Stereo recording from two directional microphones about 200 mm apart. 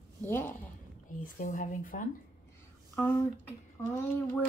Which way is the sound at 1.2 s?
40° left (ahead or behind).